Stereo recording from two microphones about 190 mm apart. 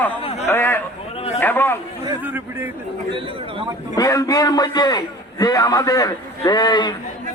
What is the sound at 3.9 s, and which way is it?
A man's voice, 20° left (ahead or behind).